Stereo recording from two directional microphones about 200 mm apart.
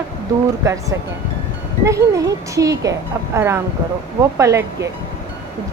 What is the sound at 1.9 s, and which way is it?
Speech, 15° right (ahead or behind).